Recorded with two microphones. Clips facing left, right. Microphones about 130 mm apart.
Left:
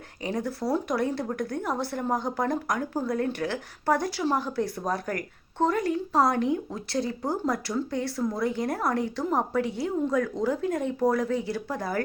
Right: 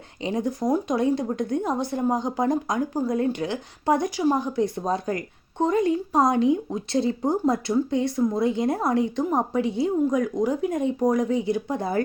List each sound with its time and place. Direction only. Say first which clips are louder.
0.3 s speech: right 4 dB; 20° right (ahead or behind)